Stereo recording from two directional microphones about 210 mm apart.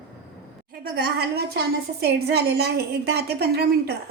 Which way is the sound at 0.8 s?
45° right (ahead or behind).